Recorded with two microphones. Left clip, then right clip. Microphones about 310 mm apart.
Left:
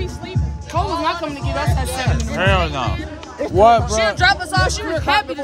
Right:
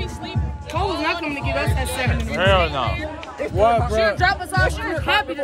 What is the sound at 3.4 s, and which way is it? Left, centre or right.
Speech, left.